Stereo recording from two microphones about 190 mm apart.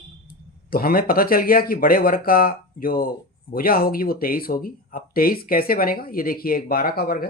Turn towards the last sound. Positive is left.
turn(degrees=55)  # may be behind; listen again after turning